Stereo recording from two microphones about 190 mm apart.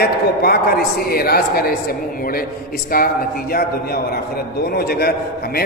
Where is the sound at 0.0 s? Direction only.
55° left (ahead or behind).